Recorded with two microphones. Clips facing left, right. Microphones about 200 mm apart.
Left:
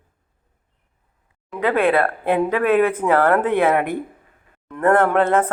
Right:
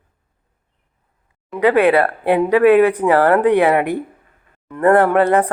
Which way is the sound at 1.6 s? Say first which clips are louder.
Right 4 dB; 15° right (ahead or behind).